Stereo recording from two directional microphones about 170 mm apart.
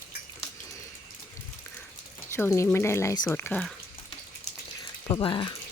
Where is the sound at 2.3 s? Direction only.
15° left (ahead or behind).